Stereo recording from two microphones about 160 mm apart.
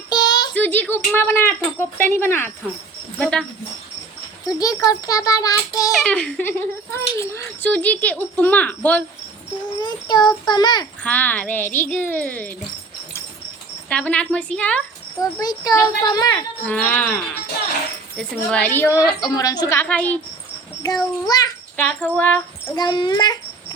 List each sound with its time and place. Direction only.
0.1 s a sound: 25° left (ahead or behind)
0.5 s a child's voice: 10° left (ahead or behind)
4.5 s a child's voice: 20° left (ahead or behind)
5.9 s a child's voice: 5° left (ahead or behind)
9.8 s a child's voice: 25° left (ahead or behind)
11.0 s a child's voice: 10° left (ahead or behind)
13.9 s a child's voice: 10° left (ahead or behind)
15.2 s a child's voice: 25° left (ahead or behind)
16.6 s a child's voice: 10° left (ahead or behind)
18.2 s a child's voice: 5° left (ahead or behind)
20.8 s a child's voice: 25° left (ahead or behind)
21.8 s a child's voice: 10° left (ahead or behind)
22.7 s a child's voice: 25° left (ahead or behind)